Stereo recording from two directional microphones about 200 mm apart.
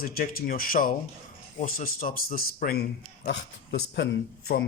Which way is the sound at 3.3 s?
60° left (ahead or behind).